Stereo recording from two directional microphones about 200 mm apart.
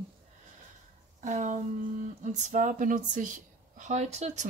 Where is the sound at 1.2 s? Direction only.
35° right (ahead or behind).